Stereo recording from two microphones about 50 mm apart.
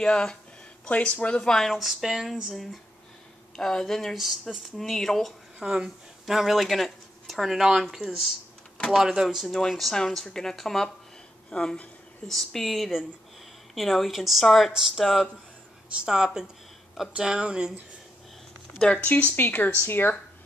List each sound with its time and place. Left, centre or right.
0.0 s speech: centre
1.4 s speech: centre
1.7 s speech: centre
2.5 s speech: centre
5.6 s speech: centre
6.2 s speech: centre
9.5 s speech: centre
12.3 s speech: centre
15.9 s speech: centre
18.9 s speech: left
19.3 s speech: left